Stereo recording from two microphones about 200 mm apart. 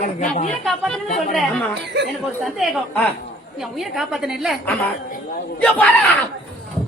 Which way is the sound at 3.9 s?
Centre (ahead or behind).